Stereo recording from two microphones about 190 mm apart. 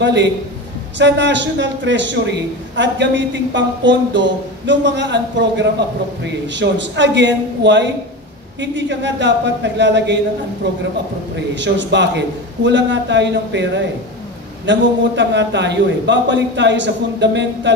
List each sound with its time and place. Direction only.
0.0 s a man's voice: 65° right (ahead or behind)